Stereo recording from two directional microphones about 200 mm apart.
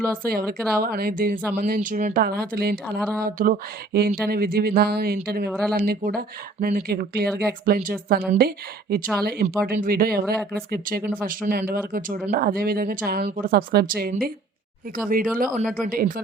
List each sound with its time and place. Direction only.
0.0 s a woman's voice: 50° right (ahead or behind)
15.1 s a woman's voice: 45° right (ahead or behind)